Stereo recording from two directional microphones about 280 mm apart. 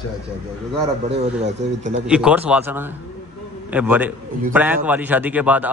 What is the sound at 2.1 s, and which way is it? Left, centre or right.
A man's voice, centre.